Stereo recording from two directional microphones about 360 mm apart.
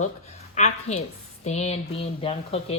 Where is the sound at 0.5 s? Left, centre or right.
Centre.